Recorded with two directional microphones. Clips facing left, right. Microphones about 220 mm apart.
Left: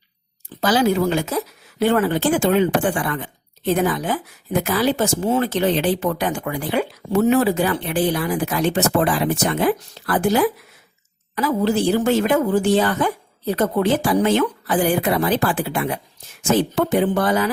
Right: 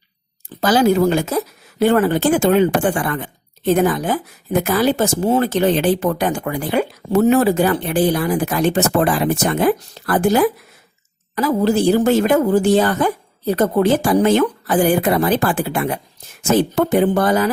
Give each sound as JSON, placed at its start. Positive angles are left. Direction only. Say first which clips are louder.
{"t": 0.6, "sound": "speech", "louder": "right 4 dB", "side_deg": -45}